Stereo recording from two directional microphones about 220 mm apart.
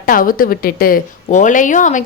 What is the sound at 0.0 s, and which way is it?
Speech, 40° left (ahead or behind).